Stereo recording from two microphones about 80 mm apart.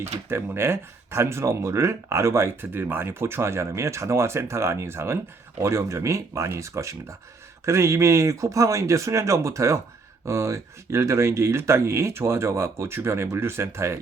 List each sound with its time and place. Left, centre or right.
0.3 s speech: right